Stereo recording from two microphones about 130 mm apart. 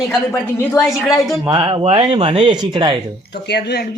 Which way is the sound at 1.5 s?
35° right (ahead or behind).